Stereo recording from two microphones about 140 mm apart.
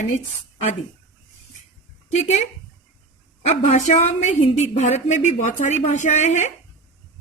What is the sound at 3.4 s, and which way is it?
A woman's voice, 55° left (ahead or behind).